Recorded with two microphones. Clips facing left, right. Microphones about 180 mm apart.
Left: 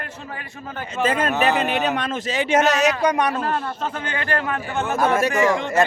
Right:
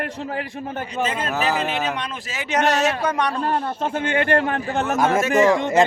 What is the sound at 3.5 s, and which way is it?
Speech, 25° right (ahead or behind).